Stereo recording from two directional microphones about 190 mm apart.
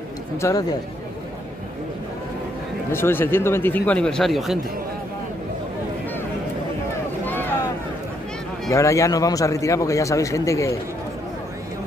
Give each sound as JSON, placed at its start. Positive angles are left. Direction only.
{"t": 0.4, "sound": "a man's voice", "side_deg": 15}
{"t": 2.9, "sound": "a man's voice", "side_deg": 10}
{"t": 7.2, "sound": "vehicle", "side_deg": 10}
{"t": 8.6, "sound": "a man's voice", "side_deg": 15}